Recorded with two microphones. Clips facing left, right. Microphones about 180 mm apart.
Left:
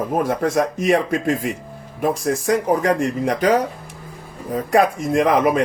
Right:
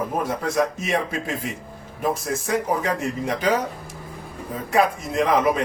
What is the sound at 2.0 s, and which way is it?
Speech, 65° left (ahead or behind).